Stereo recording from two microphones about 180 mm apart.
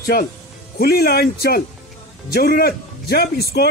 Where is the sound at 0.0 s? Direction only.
55° left (ahead or behind).